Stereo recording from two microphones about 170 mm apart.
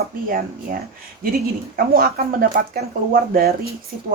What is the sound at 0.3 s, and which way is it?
Speech, 60° right (ahead or behind).